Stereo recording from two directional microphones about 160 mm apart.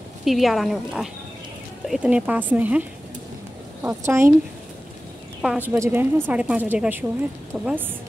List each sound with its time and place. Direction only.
0.2 s a woman's voice: centre (ahead or behind); by 4.4 s 15° right (ahead or behind)
5.4 s a woman's voice: 5° right (ahead or behind)